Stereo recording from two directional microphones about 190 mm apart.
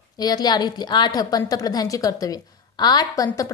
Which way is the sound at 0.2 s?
20° left (ahead or behind).